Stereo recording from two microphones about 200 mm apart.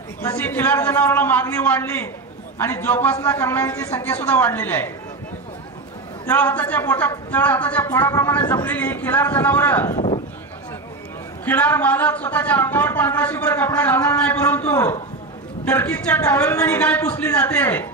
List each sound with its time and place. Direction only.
0.2 s a man's voice: 10° left (ahead or behind)
6.2 s a man's voice: 10° left (ahead or behind)
9.9 s sheep: 30° left (ahead or behind)
11.4 s a man's voice: 10° left (ahead or behind)